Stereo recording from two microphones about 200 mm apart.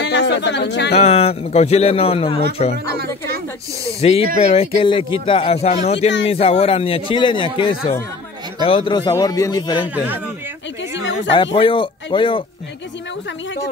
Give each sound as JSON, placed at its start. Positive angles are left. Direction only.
{"t": 0.0, "sound": "speech", "side_deg": 60}
{"t": 0.9, "sound": "a man's voice", "side_deg": 30}
{"t": 4.0, "sound": "a man's voice", "side_deg": 30}
{"t": 8.6, "sound": "a man's voice", "side_deg": 25}
{"t": 9.9, "sound": "speech", "side_deg": -10}
{"t": 11.3, "sound": "a man's voice", "side_deg": 25}